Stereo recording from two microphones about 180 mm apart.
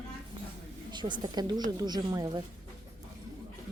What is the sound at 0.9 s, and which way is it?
Speech, 25° right (ahead or behind).